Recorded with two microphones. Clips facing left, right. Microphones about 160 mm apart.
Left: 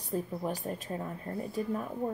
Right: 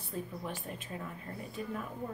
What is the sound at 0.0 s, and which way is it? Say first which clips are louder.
A woman's voice: left 6 dB; 40° left (ahead or behind).